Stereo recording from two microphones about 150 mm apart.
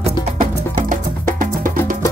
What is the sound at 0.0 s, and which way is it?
Music, 60° right (ahead or behind).